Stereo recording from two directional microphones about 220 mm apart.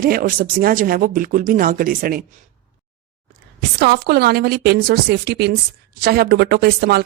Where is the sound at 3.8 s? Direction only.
45° right (ahead or behind).